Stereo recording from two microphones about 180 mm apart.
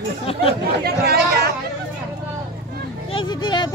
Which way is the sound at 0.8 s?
60° right (ahead or behind).